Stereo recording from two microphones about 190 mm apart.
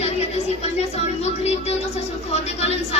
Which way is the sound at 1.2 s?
35° left (ahead or behind).